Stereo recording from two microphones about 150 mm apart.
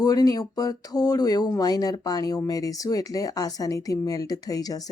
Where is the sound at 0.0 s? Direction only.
25° left (ahead or behind).